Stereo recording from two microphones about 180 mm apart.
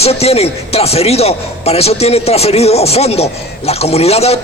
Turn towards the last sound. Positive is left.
turn(degrees=35)  # may be behind; listen again after turning